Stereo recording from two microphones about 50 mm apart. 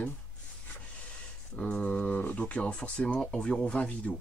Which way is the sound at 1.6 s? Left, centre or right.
Left.